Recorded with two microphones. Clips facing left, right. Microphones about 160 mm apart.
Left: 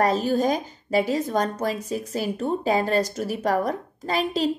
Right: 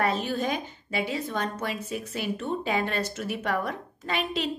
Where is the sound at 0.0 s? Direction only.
40° left (ahead or behind).